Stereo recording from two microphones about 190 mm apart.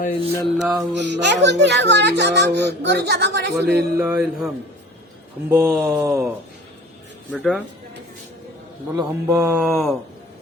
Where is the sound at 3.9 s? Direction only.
10° right (ahead or behind).